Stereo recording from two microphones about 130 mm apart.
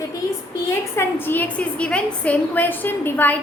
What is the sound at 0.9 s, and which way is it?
Female singing, 15° left (ahead or behind).